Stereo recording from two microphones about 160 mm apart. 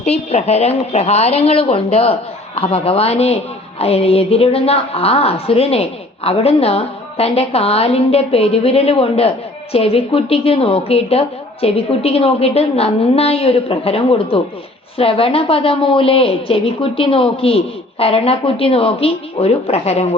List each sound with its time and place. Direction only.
0.0 s a woman's voice: 40° left (ahead or behind)